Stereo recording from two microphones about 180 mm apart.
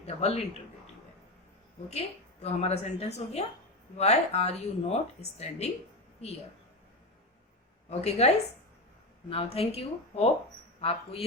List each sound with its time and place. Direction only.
0.0 s speech: 35° left (ahead or behind)
1.9 s speech: 35° left (ahead or behind)
7.9 s speech: 35° left (ahead or behind)